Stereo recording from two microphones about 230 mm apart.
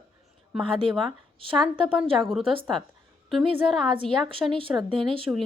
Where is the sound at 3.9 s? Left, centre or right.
Right.